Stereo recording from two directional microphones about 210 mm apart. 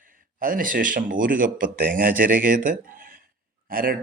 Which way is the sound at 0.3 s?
40° right (ahead or behind).